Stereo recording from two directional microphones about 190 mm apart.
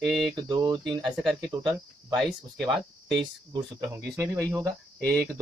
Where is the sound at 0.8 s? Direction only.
Centre (ahead or behind).